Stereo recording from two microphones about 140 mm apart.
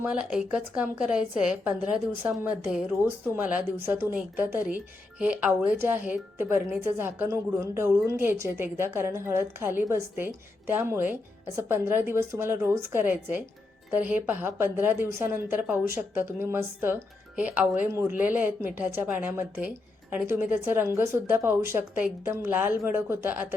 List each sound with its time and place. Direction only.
0.0 s speech: 5° right (ahead or behind)